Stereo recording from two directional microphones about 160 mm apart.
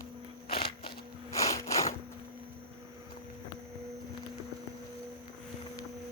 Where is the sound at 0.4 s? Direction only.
70° left (ahead or behind).